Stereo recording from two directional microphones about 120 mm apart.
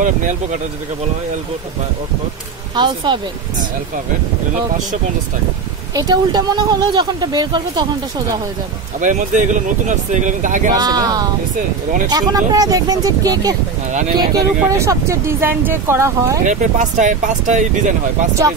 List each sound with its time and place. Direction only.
0.0 s speech: 90° right
2.7 s speech: 40° right (ahead or behind)
5.9 s speech: 35° right (ahead or behind)
9.0 s speech: 90° right
10.8 s speech: 35° right (ahead or behind)
16.4 s speech: 90° right